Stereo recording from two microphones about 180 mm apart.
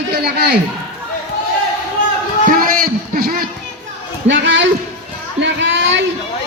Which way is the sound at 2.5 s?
50° right (ahead or behind).